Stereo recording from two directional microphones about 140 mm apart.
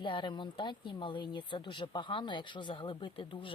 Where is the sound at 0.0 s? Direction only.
35° left (ahead or behind).